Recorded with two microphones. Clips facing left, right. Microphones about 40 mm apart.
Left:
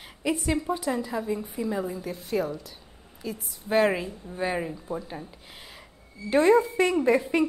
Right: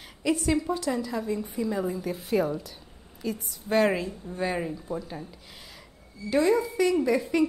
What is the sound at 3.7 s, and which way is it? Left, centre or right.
A woman's voice, centre.